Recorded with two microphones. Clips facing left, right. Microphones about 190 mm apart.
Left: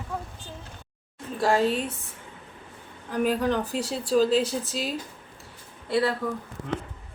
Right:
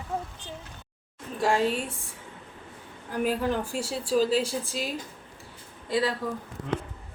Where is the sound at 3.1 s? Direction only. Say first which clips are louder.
Left 2 dB; 5° right (ahead or behind).